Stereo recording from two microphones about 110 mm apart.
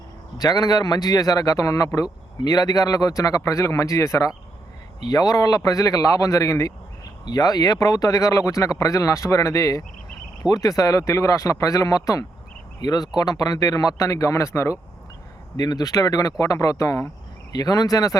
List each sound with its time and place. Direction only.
0.3 s speech: 35° left (ahead or behind)